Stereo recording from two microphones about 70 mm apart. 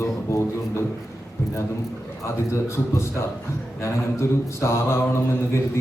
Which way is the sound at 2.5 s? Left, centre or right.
Left.